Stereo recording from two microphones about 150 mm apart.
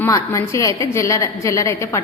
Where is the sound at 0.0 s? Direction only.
20° left (ahead or behind).